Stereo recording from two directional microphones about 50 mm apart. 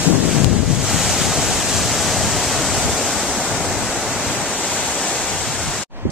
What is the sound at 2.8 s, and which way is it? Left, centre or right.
Waves, centre.